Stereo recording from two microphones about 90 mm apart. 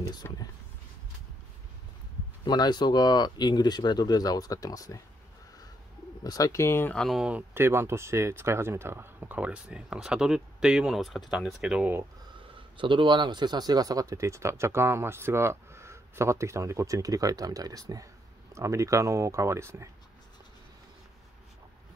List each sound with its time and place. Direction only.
0.1 s speech: 50° left (ahead or behind)
2.4 s speech: 50° left (ahead or behind)
6.2 s speech: 40° left (ahead or behind)
7.1 s speech: 10° right (ahead or behind)
7.5 s speech: 30° right (ahead or behind); by 11.9 s 10° right (ahead or behind)
12.7 s speech: 65° right (ahead or behind); by 19.9 s 30° right (ahead or behind)